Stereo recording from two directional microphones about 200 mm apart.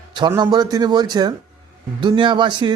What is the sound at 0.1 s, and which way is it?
Speech, 20° right (ahead or behind).